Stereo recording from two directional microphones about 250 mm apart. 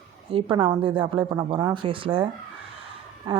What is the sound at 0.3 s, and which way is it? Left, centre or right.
Speech, right.